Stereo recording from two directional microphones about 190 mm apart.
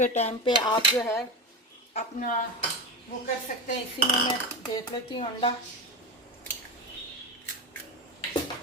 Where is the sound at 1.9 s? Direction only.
40° left (ahead or behind).